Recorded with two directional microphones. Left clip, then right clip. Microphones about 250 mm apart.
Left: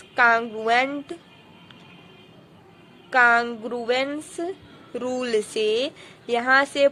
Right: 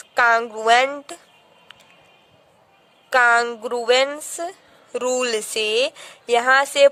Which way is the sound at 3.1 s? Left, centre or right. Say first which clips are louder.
Right 2 dB; right.